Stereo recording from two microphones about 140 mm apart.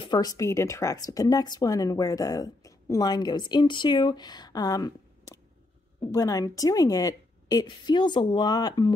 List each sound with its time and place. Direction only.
0.0 s speech: 30° left (ahead or behind)